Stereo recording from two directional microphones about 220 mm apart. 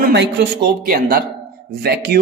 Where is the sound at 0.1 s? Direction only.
50° right (ahead or behind).